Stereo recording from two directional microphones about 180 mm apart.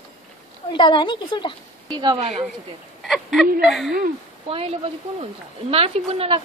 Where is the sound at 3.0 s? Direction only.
Centre (ahead or behind).